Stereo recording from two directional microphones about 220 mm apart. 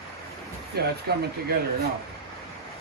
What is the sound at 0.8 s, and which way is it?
Speech, 45° right (ahead or behind).